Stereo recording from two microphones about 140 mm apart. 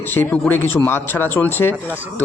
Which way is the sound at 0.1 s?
15° left (ahead or behind).